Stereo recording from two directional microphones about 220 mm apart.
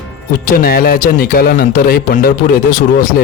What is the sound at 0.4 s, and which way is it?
A man's voice, 40° left (ahead or behind).